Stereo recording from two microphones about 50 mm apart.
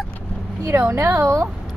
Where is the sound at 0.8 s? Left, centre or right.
Right.